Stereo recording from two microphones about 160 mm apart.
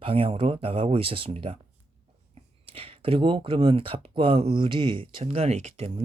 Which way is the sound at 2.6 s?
35° right (ahead or behind).